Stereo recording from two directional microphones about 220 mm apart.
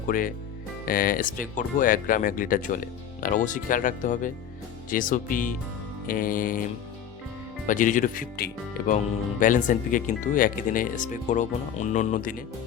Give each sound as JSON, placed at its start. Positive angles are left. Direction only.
{"t": 0.1, "sound": "speech", "side_deg": 40}
{"t": 7.7, "sound": "speech", "side_deg": 35}